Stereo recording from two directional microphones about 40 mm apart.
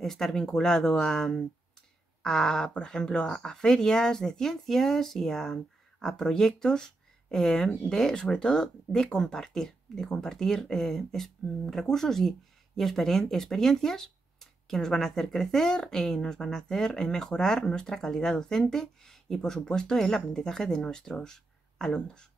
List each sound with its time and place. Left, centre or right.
0.0 s speech: centre